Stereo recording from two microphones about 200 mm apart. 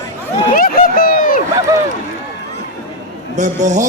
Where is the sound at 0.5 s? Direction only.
45° left (ahead or behind).